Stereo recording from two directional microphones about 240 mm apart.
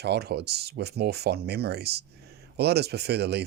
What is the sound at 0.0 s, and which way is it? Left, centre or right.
Speech, right.